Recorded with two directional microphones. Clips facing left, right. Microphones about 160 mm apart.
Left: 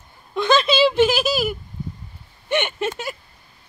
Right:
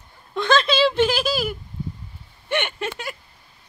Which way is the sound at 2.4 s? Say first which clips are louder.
Left 3 dB; 20° left (ahead or behind).